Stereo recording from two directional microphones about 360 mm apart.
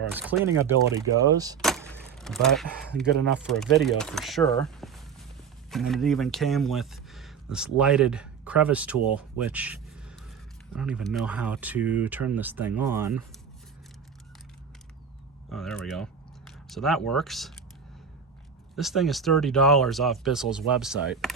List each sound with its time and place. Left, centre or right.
0.1 s speech: centre
1.6 s a sound: centre
3.4 s speech: centre
15.4 s speech: centre
18.8 s speech: centre